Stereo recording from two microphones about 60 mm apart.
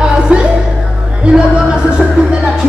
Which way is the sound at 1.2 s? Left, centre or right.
Centre.